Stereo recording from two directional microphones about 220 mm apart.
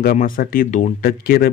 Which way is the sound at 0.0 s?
40° left (ahead or behind).